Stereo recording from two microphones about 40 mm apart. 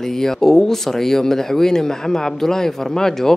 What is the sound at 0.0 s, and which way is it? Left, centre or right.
A woman's voice, centre.